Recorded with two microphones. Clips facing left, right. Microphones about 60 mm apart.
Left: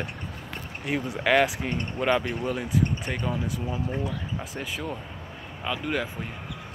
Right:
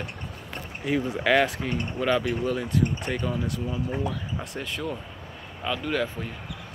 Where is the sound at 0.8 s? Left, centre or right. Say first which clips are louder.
Right 1 dB; centre.